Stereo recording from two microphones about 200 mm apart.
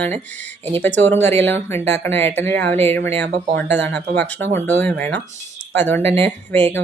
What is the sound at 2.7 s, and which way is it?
Music, 30° right (ahead or behind).